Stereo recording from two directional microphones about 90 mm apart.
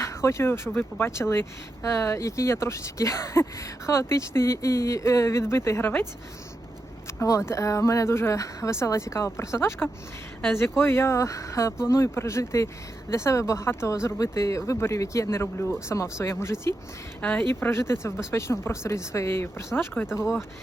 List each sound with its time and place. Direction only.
0.0 s speech: 35° left (ahead or behind)
7.2 s speech: 35° left (ahead or behind)
17.2 s speech: 15° left (ahead or behind)
17.5 s speech: 30° left (ahead or behind)